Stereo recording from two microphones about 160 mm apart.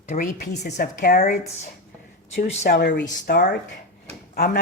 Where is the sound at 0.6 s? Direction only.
60° left (ahead or behind).